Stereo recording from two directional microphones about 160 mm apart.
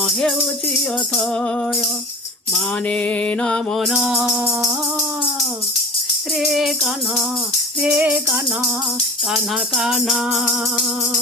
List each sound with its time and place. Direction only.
0.0 s music: 5° left (ahead or behind)
2.9 s music: 10° left (ahead or behind)
4.3 s music: 20° right (ahead or behind)
6.4 s music: centre (ahead or behind)